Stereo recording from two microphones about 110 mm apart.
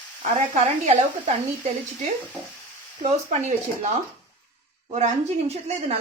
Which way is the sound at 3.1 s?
90° right.